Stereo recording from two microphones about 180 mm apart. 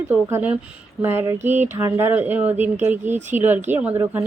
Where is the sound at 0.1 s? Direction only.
10° right (ahead or behind).